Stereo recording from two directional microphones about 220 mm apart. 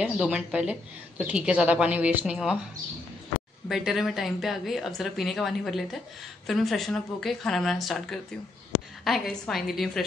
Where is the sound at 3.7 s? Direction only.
Centre (ahead or behind).